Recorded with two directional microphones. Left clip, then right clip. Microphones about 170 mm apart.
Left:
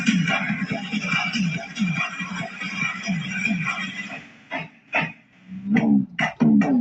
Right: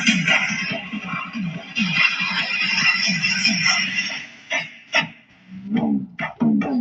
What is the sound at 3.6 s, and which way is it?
Music, 35° left (ahead or behind).